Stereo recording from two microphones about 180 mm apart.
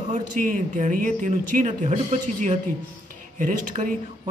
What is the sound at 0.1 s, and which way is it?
Speech, 45° right (ahead or behind).